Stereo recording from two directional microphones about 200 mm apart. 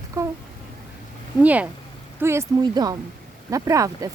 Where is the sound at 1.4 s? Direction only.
5° right (ahead or behind).